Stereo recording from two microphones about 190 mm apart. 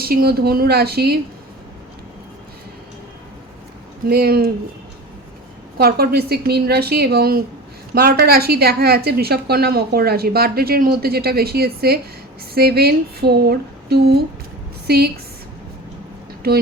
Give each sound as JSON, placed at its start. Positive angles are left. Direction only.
{"t": 0.0, "sound": "a woman's voice", "side_deg": -55}
{"t": 4.0, "sound": "speech", "side_deg": -50}
{"t": 5.7, "sound": "a woman's voice", "side_deg": -55}
{"t": 16.4, "sound": "a woman's voice", "side_deg": -55}